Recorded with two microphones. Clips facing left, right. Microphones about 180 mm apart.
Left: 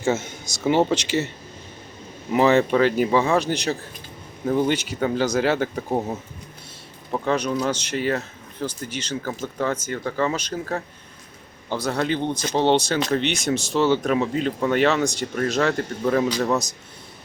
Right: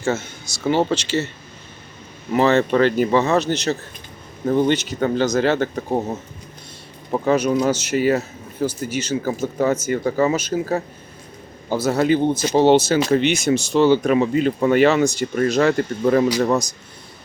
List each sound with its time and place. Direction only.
0.0 s speech: 20° left (ahead or behind)
2.3 s speech: 10° left (ahead or behind)
5.9 s speech: 5° right (ahead or behind)